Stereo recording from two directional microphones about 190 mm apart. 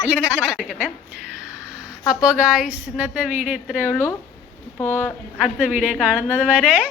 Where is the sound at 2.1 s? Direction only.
5° right (ahead or behind).